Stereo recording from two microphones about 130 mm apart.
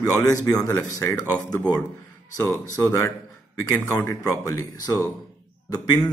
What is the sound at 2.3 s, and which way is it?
A man's voice, 20° left (ahead or behind).